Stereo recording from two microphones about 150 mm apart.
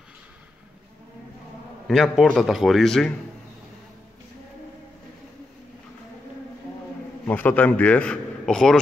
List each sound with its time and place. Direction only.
1.9 s a man's voice: centre (ahead or behind)
7.2 s a man's voice: 10° left (ahead or behind)